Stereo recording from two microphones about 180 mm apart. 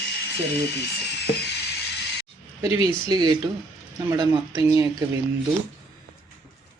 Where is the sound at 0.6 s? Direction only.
65° left (ahead or behind).